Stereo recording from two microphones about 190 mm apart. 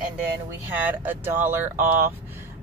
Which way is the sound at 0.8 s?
10° right (ahead or behind).